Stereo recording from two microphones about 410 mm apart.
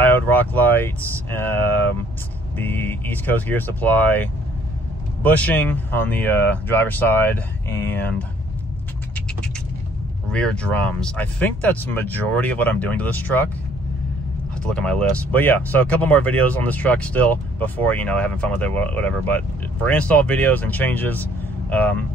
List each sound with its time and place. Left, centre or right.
0.0 s speech: centre
10.3 s speech: centre
14.6 s speech: centre